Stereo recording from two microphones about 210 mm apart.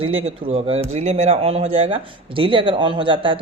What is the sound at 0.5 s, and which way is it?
Speech, 30° right (ahead or behind).